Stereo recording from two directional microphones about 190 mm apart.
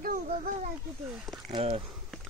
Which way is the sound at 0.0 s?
45° right (ahead or behind).